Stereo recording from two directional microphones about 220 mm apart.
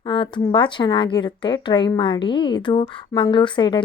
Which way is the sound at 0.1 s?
20° left (ahead or behind).